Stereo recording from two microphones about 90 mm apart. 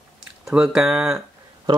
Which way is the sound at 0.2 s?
5° right (ahead or behind).